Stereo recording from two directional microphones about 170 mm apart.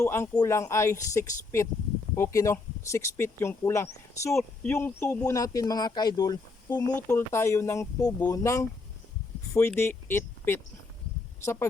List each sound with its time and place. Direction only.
0.0 s speech: 15° left (ahead or behind)